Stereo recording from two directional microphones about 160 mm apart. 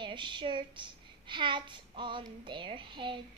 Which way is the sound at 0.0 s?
30° right (ahead or behind).